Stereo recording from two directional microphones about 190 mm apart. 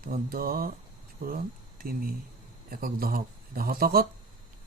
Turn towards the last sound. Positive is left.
turn(degrees=-50)  # may be behind; listen again after turning